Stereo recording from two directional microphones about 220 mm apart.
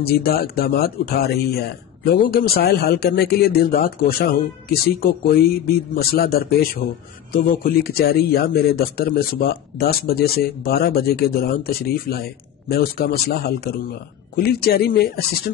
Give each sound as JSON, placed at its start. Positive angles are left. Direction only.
{"t": 0.0, "sound": "speech", "side_deg": 45}